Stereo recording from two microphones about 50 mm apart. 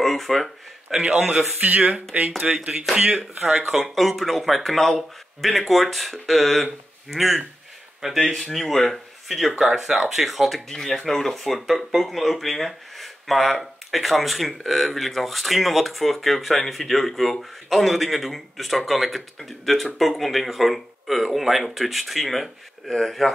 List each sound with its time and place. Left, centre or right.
0.0 s speech: centre
0.8 s a man's voice: centre
1.6 s speech: right
2.4 s a man's voice: right
3.3 s speech: centre